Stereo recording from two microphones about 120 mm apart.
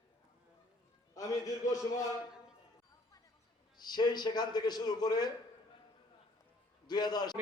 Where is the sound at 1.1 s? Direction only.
30° left (ahead or behind).